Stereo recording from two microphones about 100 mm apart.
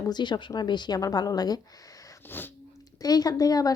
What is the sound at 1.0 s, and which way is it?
Speech, 35° left (ahead or behind).